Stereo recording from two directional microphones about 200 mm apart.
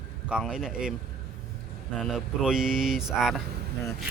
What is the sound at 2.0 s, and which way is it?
Speech, centre (ahead or behind).